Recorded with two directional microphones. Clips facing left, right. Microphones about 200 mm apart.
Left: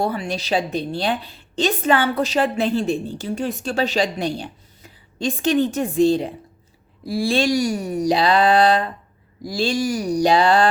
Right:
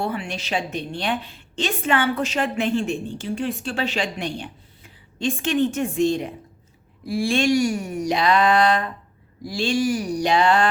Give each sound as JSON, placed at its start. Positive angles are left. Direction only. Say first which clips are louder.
{"t": 0.0, "sound": "a woman's voice", "louder": "left 4 dB", "side_deg": 40}